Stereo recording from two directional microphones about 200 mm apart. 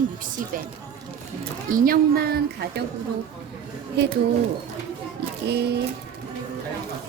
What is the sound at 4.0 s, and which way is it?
Speech, 60° right (ahead or behind).